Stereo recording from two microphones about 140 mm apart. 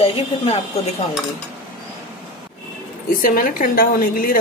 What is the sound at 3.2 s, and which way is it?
A woman's voice, 80° left.